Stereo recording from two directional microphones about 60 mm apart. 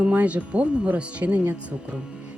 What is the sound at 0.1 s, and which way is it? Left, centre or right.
Speech, right.